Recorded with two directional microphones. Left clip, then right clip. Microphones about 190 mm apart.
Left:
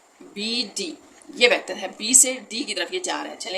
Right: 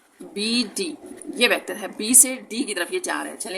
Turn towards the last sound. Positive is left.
turn(degrees=-40)  # may be behind; listen again after turning